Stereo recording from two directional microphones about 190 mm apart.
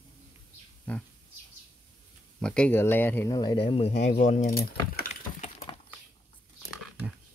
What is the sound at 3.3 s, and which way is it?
Speech, 25° left (ahead or behind).